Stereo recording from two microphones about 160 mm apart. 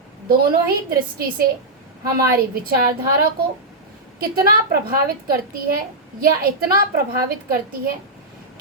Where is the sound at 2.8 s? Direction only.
65° right (ahead or behind).